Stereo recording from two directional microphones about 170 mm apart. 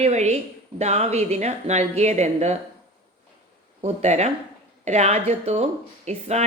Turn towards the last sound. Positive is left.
turn(degrees=-40)  # may be behind; listen again after turning